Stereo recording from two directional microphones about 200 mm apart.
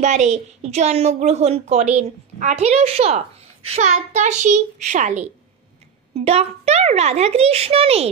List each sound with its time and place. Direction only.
0.0 s a woman's voice: 35° right (ahead or behind)